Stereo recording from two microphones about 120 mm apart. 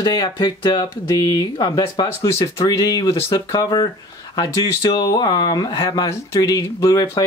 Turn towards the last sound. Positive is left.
turn(degrees=30)  # may be behind; listen again after turning